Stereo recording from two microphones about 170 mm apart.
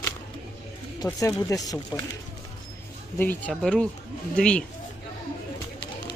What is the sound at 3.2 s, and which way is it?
Speech, 10° left (ahead or behind).